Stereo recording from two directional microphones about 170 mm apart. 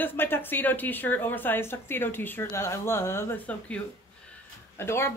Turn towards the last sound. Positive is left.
turn(degrees=15)  # may be behind; listen again after turning